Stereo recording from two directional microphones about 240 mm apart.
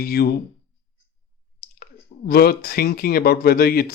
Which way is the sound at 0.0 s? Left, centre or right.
Left.